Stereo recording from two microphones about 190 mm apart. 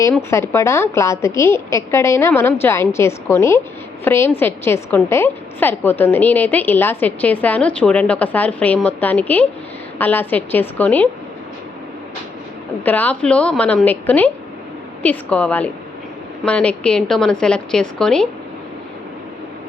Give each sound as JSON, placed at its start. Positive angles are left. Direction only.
{"t": 0.1, "sound": "a woman's voice", "side_deg": 15}
{"t": 12.8, "sound": "a woman's voice", "side_deg": 10}